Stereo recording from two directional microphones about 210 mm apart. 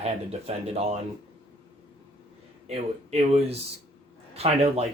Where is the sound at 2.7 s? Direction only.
30° right (ahead or behind).